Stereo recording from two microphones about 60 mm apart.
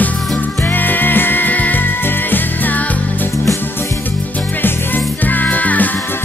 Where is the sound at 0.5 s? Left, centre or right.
Left.